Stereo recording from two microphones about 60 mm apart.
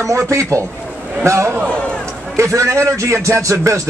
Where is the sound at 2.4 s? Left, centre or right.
Right.